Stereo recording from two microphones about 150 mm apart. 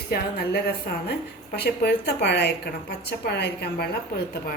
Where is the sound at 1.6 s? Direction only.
90° left.